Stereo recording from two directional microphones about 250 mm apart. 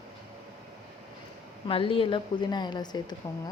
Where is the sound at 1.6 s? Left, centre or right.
Left.